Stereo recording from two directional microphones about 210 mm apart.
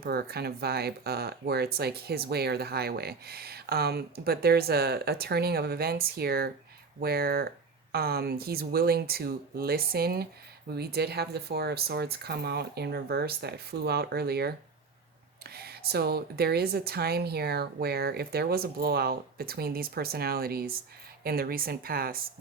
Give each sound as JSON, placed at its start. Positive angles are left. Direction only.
{"t": 0.0, "sound": "speech", "side_deg": -50}